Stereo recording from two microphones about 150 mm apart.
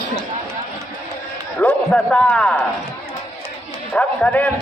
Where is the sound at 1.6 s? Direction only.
10° left (ahead or behind).